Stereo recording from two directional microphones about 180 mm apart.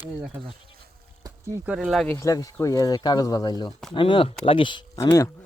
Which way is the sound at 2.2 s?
20° left (ahead or behind).